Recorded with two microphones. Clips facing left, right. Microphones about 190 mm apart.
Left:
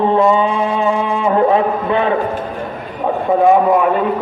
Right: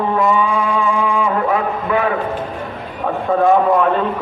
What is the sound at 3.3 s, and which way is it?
Speech, 15° left (ahead or behind).